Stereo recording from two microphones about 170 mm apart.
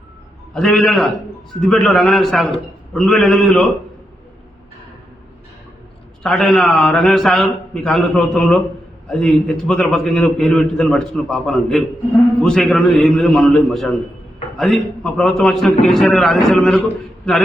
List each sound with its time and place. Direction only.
0.5 s a man's voice: centre (ahead or behind)
6.2 s a man's voice: centre (ahead or behind)